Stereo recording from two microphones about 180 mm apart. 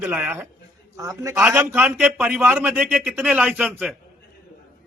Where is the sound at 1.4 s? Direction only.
5° right (ahead or behind).